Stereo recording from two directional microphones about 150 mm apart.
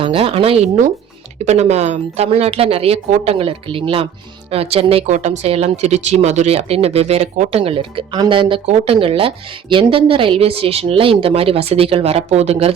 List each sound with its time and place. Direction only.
0.0 s speech: 35° right (ahead or behind)
7.6 s speech: 35° right (ahead or behind)